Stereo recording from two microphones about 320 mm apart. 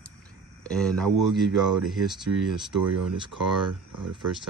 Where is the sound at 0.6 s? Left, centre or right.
Centre.